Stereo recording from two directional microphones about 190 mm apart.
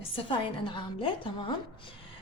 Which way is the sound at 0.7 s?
25° left (ahead or behind).